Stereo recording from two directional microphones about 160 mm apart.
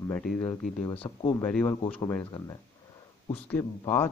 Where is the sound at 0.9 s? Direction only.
35° left (ahead or behind).